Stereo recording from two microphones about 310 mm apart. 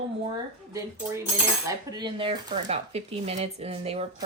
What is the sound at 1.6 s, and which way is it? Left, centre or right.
Speech, centre.